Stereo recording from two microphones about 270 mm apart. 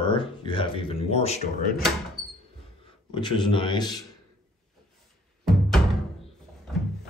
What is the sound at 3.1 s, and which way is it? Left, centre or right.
Speech, centre.